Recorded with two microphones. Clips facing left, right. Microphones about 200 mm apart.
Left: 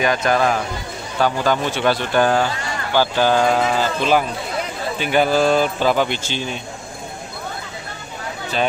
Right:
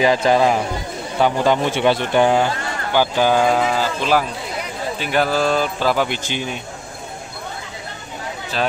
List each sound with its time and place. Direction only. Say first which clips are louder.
0.0 s a man's voice: right 3 dB; 25° right (ahead or behind)